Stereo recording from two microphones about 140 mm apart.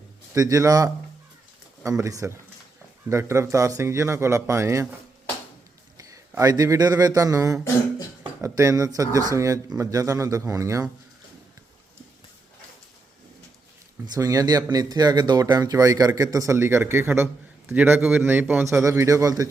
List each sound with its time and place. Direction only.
0.3 s speech: 25° right (ahead or behind)
6.0 s a man's voice: 25° right (ahead or behind)
14.1 s a man's voice: 25° right (ahead or behind)